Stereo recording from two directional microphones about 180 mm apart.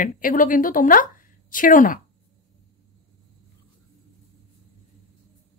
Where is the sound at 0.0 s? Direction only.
50° left (ahead or behind).